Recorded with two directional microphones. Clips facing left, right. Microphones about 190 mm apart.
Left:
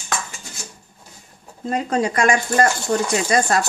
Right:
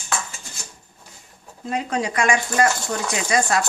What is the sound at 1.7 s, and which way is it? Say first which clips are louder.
Speech: left 4 dB; 45° left (ahead or behind).